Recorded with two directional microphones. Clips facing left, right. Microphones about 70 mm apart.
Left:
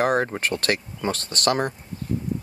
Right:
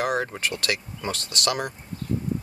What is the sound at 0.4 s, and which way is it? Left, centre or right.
Speech, left.